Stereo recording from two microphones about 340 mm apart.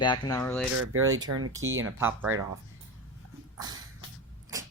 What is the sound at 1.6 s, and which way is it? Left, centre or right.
Speech, right.